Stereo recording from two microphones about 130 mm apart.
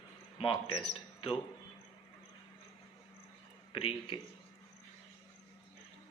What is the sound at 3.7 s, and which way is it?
Speech, 45° left (ahead or behind).